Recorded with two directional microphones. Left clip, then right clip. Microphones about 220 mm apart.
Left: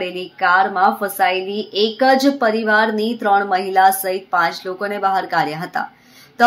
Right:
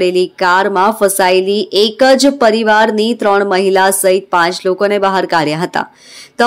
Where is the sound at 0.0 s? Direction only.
50° right (ahead or behind).